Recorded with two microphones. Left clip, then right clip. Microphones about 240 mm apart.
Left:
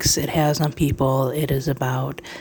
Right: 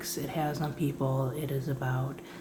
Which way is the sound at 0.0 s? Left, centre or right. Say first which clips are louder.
Left 13 dB; left.